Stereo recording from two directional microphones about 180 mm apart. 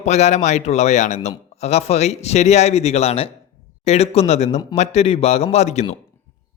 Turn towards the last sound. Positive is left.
turn(degrees=40)  # may be behind; listen again after turning